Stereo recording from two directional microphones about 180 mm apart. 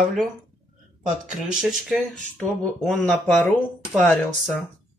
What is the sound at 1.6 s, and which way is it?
Speech, centre (ahead or behind).